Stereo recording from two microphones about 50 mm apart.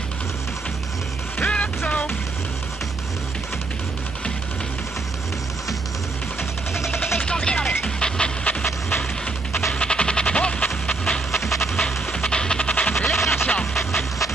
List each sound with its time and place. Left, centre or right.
1.4 s music: left
6.9 s vehicle: centre
7.2 s music: centre
9.7 s music: centre
12.9 s music: centre